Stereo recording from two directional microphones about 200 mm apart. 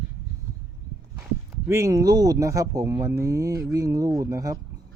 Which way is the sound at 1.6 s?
15° right (ahead or behind).